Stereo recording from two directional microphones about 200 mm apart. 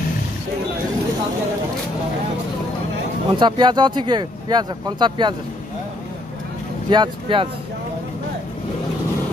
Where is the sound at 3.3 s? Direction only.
25° right (ahead or behind).